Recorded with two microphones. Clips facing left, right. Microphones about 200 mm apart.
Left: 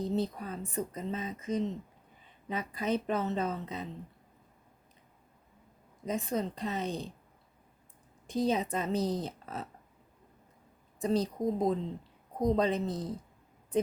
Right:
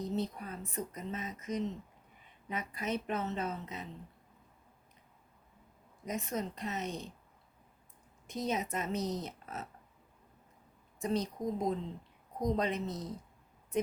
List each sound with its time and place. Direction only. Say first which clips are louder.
0.0 s speech: left 4 dB; 35° left (ahead or behind)
6.1 s speech: left 4 dB; 30° left (ahead or behind)
8.3 s speech: left 5 dB; 30° left (ahead or behind)
11.0 s speech: left 4 dB; 35° left (ahead or behind)